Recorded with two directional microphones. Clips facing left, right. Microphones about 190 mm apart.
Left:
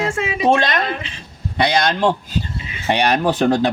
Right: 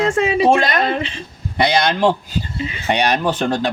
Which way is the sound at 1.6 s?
15° right (ahead or behind).